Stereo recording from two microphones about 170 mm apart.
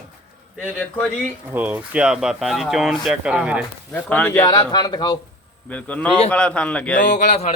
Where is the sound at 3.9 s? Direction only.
10° left (ahead or behind).